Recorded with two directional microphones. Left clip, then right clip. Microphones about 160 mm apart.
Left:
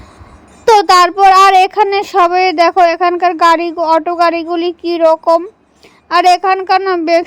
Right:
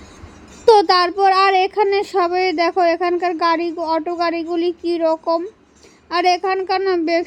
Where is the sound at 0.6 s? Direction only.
35° left (ahead or behind).